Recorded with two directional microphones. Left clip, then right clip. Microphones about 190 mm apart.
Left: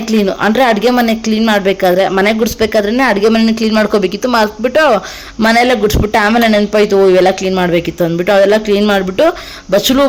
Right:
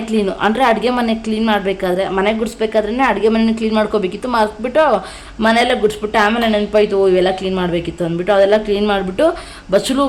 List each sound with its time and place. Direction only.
0.1 s a woman's voice: 25° left (ahead or behind)